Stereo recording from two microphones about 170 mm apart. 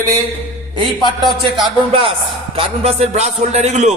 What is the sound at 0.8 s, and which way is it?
Speech, 30° right (ahead or behind).